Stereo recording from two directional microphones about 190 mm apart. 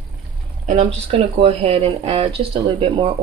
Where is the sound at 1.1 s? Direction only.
30° right (ahead or behind).